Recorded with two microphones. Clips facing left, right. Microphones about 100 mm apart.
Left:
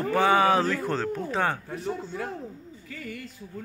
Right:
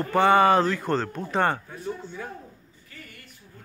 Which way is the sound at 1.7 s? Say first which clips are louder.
Left 2 dB; 85° left.